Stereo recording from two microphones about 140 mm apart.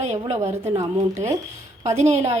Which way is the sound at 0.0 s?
50° right (ahead or behind).